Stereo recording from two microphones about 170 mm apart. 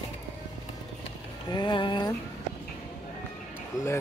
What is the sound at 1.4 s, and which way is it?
Speech, 25° left (ahead or behind).